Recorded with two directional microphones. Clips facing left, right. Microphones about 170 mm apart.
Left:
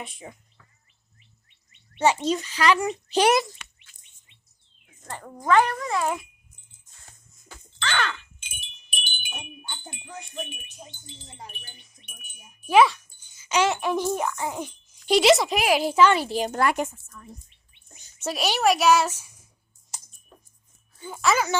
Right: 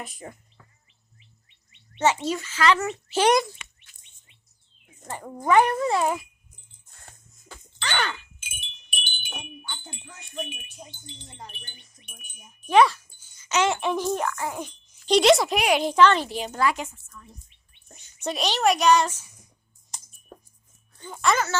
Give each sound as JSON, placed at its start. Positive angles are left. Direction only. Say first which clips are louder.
{"t": 0.0, "sound": "a child's voice", "louder": "right 1 dB", "side_deg": 0}
{"t": 1.5, "sound": "a sound", "louder": "right 2 dB", "side_deg": 50}
{"t": 2.2, "sound": "a child's voice", "louder": "left 1 dB", "side_deg": 20}
{"t": 4.9, "sound": "speech", "louder": "right 2 dB", "side_deg": -15}
{"t": 5.8, "sound": "a child's voice", "louder": "right 4 dB", "side_deg": -30}
{"t": 7.1, "sound": "music", "louder": "right 4 dB", "side_deg": -60}
{"t": 7.9, "sound": "wind chime", "louder": "even", "side_deg": -10}
{"t": 9.1, "sound": "wind chime", "louder": "right 1 dB", "side_deg": 15}
{"t": 10.3, "sound": "a child's voice", "louder": "right 5 dB", "side_deg": 0}
{"t": 13.0, "sound": "a sound", "louder": "right 1 dB", "side_deg": -10}
{"t": 13.3, "sound": "a child's voice", "louder": "left 1 dB", "side_deg": 10}
{"t": 16.5, "sound": "a woman's voice", "louder": "left 2 dB", "side_deg": 55}
{"t": 18.2, "sound": "a child's voice", "louder": "even", "side_deg": 5}
{"t": 21.0, "sound": "a child's voice", "louder": "even", "side_deg": 5}